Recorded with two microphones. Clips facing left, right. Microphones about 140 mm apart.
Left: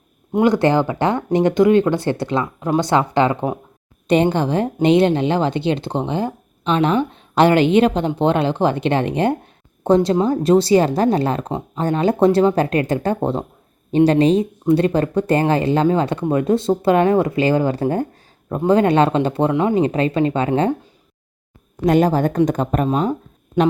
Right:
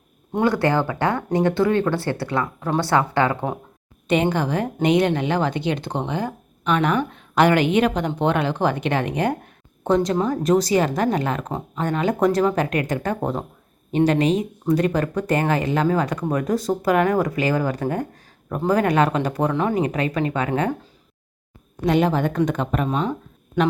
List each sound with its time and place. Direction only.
0.3 s speech: 20° left (ahead or behind)
4.0 s a woman's voice: 35° left (ahead or behind)
21.8 s a woman's voice: 40° left (ahead or behind)